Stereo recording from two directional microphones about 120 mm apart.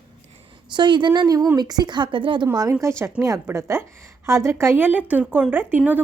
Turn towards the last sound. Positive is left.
turn(degrees=-15)  # may be behind; listen again after turning